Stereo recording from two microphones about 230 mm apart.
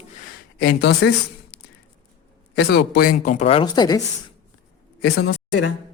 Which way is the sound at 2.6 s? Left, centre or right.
Left.